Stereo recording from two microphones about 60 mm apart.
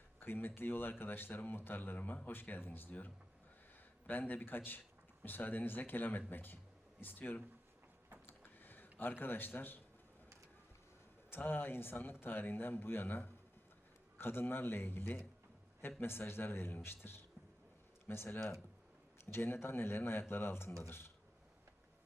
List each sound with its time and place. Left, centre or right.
0.2 s speech: left
8.3 s a sound: left
11.3 s speech: left